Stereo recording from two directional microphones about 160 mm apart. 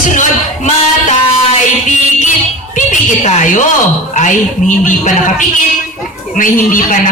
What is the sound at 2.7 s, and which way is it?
Speech, 50° left (ahead or behind).